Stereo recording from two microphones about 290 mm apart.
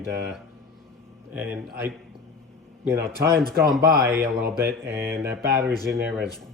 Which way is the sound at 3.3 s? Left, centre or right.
Right.